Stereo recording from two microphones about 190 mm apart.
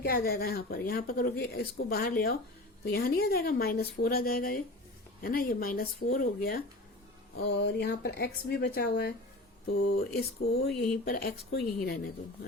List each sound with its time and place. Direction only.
0.0 s speech: 50° left (ahead or behind)